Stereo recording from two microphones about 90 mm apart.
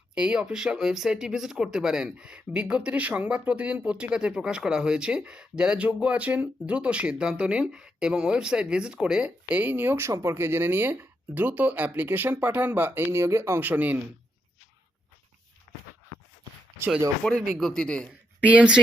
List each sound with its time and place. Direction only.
0.1 s speech: 10° right (ahead or behind); by 13.7 s 30° right (ahead or behind)
13.7 s speech: 20° right (ahead or behind)
17.5 s speech: 5° left (ahead or behind)
18.1 s speech: 15° right (ahead or behind)